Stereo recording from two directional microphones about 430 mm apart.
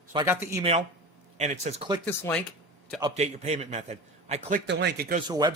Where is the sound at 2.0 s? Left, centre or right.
Centre.